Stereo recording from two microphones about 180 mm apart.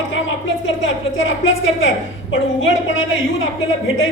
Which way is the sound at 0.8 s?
90° left.